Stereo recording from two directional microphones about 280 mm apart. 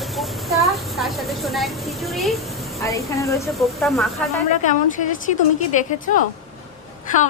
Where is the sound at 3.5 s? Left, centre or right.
Centre.